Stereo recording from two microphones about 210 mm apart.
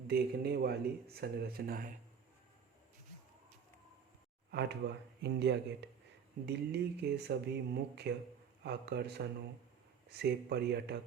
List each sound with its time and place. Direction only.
0.1 s speech: 50° right (ahead or behind)
4.5 s speech: 55° right (ahead or behind)